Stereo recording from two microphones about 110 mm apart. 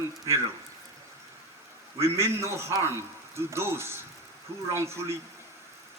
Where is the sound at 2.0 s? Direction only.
25° right (ahead or behind).